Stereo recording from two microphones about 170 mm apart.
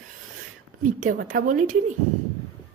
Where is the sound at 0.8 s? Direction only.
50° right (ahead or behind).